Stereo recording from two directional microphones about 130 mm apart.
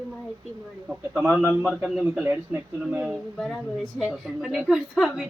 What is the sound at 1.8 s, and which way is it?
Speech, 5° right (ahead or behind).